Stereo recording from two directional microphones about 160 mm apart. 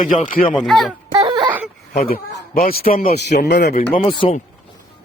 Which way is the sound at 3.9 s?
35° left (ahead or behind).